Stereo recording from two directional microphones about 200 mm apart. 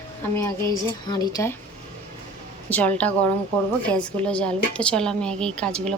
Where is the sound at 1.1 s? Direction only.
15° left (ahead or behind).